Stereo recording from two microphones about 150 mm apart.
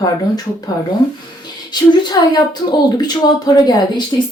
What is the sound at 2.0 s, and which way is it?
Speech, 30° left (ahead or behind).